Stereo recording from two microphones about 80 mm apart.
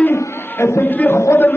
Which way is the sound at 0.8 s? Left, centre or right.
Left.